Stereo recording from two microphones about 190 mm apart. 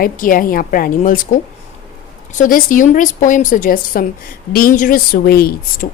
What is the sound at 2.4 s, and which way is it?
A woman's voice, 45° left (ahead or behind).